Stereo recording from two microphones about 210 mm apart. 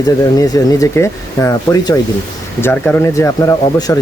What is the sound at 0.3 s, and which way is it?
Speech, 15° left (ahead or behind).